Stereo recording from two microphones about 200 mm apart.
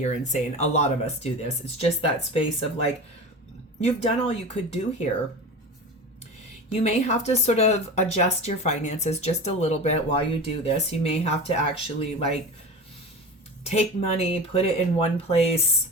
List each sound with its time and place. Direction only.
0.0 s speech: 35° left (ahead or behind)
3.8 s speech: 30° left (ahead or behind)
6.7 s speech: 35° left (ahead or behind)
13.7 s speech: 30° left (ahead or behind)